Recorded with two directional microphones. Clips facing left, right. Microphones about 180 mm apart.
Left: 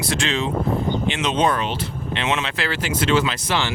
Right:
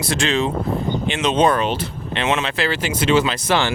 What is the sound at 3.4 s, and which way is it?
Speech, 50° right (ahead or behind).